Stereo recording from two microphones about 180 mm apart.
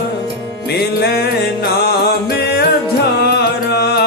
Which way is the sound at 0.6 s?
65° left (ahead or behind).